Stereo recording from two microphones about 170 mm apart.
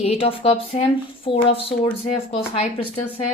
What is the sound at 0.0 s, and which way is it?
A woman's voice, 35° left (ahead or behind).